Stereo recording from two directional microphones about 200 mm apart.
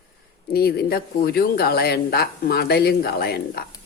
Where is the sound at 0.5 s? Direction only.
50° left (ahead or behind).